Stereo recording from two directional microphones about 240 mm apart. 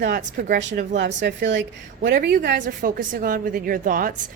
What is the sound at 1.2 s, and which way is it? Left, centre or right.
A woman's voice, right.